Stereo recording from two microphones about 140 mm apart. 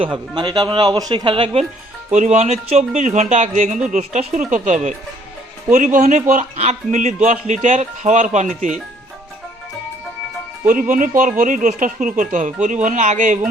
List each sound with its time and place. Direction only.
0.0 s speech: 35° right (ahead or behind)
2.1 s a man's voice: 55° right (ahead or behind)
10.7 s a man's voice: 75° right (ahead or behind)